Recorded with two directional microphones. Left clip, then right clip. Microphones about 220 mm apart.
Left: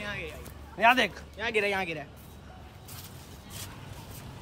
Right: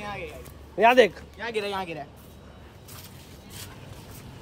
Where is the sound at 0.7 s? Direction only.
10° left (ahead or behind).